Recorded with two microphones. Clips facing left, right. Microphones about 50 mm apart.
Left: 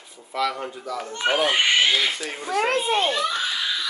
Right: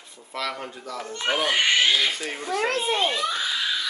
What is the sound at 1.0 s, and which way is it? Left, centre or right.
Speech, left.